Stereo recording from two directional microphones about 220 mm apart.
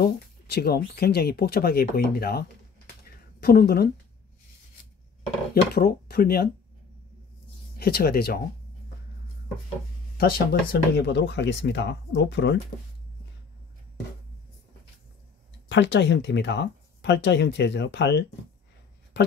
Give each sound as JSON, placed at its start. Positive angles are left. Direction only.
{"t": 0.0, "sound": "speech", "side_deg": 45}
{"t": 5.5, "sound": "speech", "side_deg": 45}
{"t": 7.8, "sound": "speech", "side_deg": 45}
{"t": 10.1, "sound": "speech", "side_deg": 45}
{"t": 15.7, "sound": "speech", "side_deg": 55}